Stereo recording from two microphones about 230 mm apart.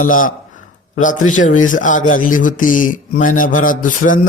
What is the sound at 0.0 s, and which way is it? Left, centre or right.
A man's voice, left.